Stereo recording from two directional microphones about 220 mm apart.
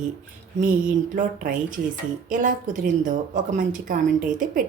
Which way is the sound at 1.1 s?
35° right (ahead or behind).